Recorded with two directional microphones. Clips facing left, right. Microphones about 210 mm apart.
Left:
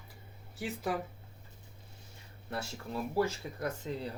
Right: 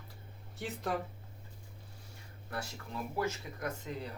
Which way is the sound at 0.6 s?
Centre (ahead or behind).